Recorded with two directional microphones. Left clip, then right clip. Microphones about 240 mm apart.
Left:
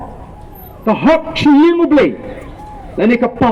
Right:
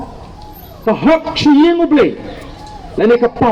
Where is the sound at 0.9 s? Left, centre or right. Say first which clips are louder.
Even; left.